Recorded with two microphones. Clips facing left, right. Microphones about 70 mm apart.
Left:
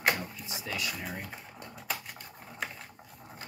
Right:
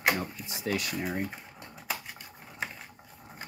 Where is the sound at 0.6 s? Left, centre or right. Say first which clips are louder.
Right 5 dB; right.